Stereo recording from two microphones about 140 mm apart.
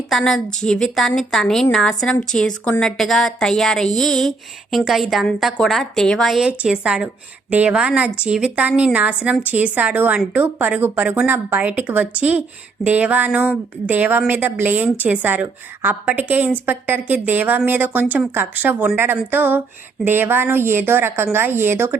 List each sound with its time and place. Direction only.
0.1 s a woman's voice: 5° left (ahead or behind); by 21.9 s 15° right (ahead or behind)